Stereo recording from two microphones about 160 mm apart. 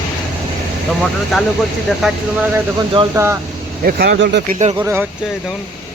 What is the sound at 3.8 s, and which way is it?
Speech, 65° right (ahead or behind).